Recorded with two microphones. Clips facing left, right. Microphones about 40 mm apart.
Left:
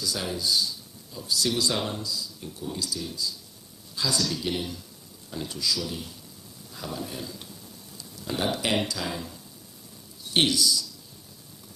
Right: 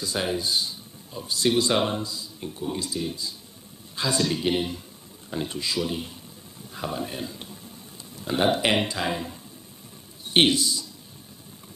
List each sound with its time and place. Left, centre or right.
0.0 s speech: right